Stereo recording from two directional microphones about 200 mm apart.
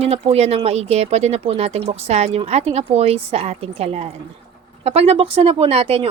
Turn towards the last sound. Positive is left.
turn(degrees=-30)  # may be behind; listen again after turning